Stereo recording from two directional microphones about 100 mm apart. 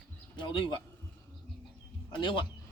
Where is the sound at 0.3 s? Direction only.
55° left (ahead or behind).